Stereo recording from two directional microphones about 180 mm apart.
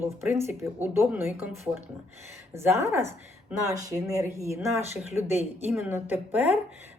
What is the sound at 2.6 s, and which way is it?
A woman's voice, 15° right (ahead or behind).